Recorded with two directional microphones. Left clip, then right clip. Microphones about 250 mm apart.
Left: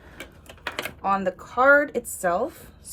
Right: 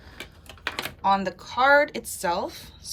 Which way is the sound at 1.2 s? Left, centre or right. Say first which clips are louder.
Left 2 dB; centre.